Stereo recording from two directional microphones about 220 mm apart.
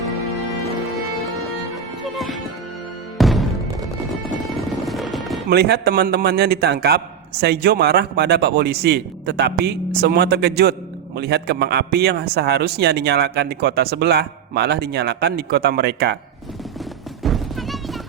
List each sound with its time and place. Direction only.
2.1 s music: centre (ahead or behind)
4.9 s music: centre (ahead or behind)
5.5 s speech: 50° right (ahead or behind)
17.2 s music: centre (ahead or behind)